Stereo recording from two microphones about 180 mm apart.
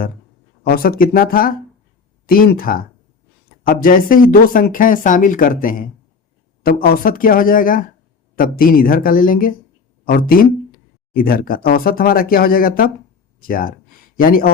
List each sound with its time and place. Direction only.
0.6 s speech: 55° left (ahead or behind)